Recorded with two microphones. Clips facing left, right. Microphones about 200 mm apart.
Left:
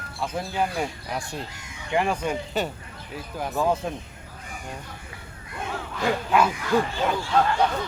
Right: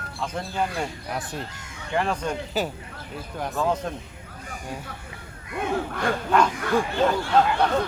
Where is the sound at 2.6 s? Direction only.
Centre (ahead or behind).